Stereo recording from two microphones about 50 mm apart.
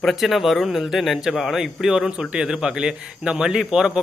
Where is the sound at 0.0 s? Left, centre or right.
Centre.